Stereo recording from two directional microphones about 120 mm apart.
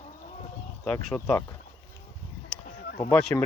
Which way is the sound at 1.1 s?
15° left (ahead or behind).